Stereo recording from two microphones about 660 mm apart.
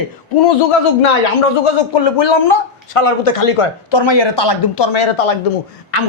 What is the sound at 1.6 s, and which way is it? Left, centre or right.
Speech, left.